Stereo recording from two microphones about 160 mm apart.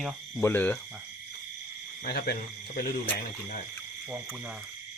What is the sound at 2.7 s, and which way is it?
Speech, 60° left (ahead or behind).